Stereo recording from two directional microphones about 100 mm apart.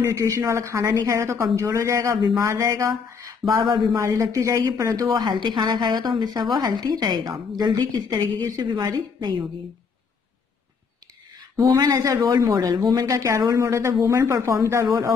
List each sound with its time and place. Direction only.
0.0 s a woman's voice: 30° right (ahead or behind)
3.9 s speech: 30° right (ahead or behind)
5.1 s a woman's voice: 50° right (ahead or behind)
11.5 s speech: 35° right (ahead or behind)